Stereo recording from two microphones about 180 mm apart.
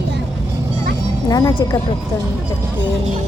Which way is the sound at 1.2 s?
20° left (ahead or behind).